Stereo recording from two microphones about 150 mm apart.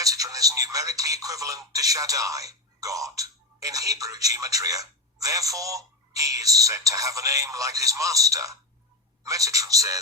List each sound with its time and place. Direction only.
0.0 s speech: 25° right (ahead or behind)